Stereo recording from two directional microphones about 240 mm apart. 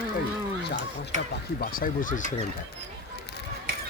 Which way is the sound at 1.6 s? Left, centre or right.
Left.